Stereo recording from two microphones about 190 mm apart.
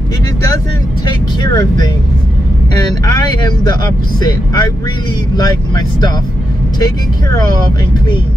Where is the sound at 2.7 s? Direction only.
20° left (ahead or behind).